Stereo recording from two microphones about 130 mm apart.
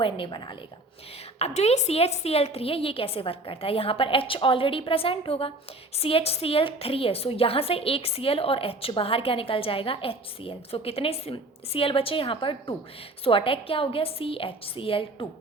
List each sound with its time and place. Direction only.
0.0 s a woman's voice: 40° left (ahead or behind)
1.4 s a woman's voice: 55° left (ahead or behind)